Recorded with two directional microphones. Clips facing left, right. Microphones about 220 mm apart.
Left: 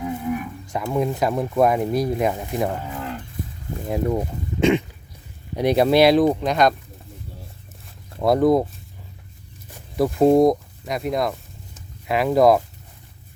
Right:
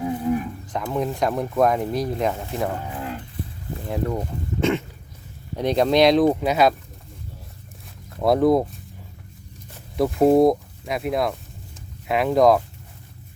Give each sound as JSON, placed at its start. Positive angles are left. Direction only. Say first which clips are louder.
{"t": 0.0, "sound": "livestock", "louder": "right 2 dB", "side_deg": -30}
{"t": 0.9, "sound": "speech", "louder": "left 2 dB", "side_deg": 0}
{"t": 3.8, "sound": "speech", "louder": "left 3 dB", "side_deg": 15}
{"t": 8.2, "sound": "speech", "louder": "left 1 dB", "side_deg": 0}
{"t": 10.0, "sound": "speech", "louder": "left 1 dB", "side_deg": 0}